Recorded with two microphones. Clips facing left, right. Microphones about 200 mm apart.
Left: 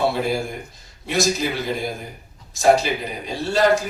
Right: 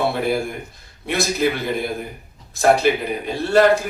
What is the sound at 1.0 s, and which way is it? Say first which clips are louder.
A man's voice: right 1 dB; 60° right (ahead or behind).